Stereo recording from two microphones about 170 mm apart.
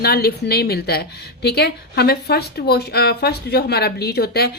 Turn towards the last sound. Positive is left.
turn(degrees=70)  # may be behind; listen again after turning